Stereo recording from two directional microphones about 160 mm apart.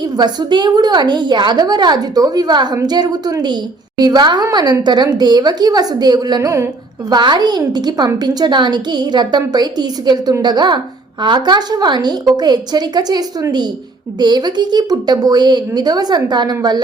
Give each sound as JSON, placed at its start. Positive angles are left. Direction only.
{"t": 0.2, "sound": "a woman's voice", "side_deg": -25}